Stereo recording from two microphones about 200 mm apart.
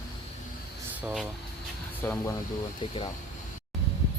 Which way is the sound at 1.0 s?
Centre (ahead or behind).